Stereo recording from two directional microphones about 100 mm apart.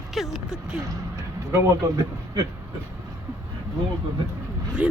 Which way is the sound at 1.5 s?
30° right (ahead or behind).